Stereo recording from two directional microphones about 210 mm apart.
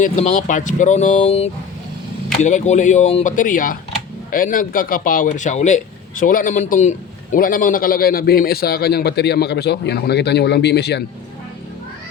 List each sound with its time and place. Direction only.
0.0 s a man's voice: 35° left (ahead or behind); by 11.0 s 55° left (ahead or behind)